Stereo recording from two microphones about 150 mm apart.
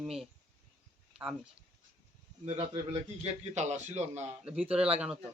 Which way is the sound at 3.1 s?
45° right (ahead or behind).